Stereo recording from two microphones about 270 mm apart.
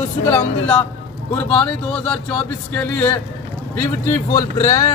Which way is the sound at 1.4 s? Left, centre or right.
Centre.